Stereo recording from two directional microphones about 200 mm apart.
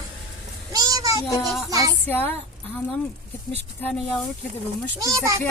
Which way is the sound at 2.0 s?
10° left (ahead or behind).